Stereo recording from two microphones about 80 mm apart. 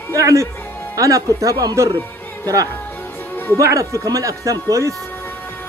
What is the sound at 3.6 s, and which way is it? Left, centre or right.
A man's voice, right.